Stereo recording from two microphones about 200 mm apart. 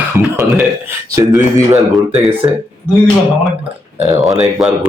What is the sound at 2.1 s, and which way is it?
Speech, 30° right (ahead or behind).